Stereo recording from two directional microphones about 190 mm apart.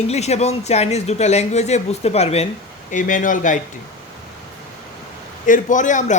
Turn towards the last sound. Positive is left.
turn(degrees=40)  # may be behind; listen again after turning